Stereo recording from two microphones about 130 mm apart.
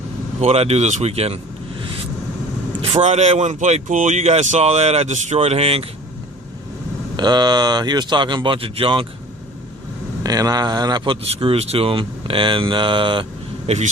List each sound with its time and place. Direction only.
0.4 s speech: 55° right (ahead or behind)
2.9 s speech: 55° right (ahead or behind)
7.2 s speech: 35° right (ahead or behind)
10.2 s speech: 30° right (ahead or behind)
13.7 s speech: 55° right (ahead or behind)